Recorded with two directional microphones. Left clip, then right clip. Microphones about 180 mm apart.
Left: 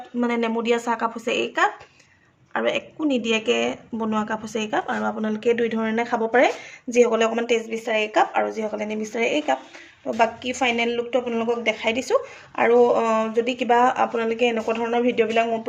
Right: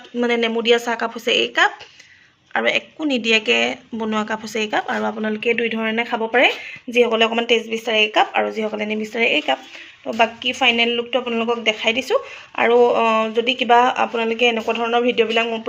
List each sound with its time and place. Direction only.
0.2 s speech: centre (ahead or behind)